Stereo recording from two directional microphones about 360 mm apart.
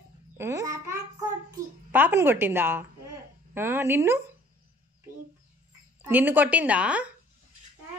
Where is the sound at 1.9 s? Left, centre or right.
Centre.